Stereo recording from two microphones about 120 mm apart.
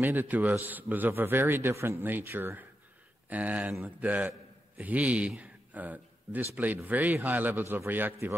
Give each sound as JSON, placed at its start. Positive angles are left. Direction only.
{"t": 0.0, "sound": "speech", "side_deg": -15}